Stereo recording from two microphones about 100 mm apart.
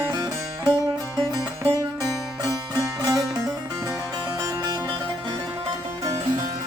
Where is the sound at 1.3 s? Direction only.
35° right (ahead or behind).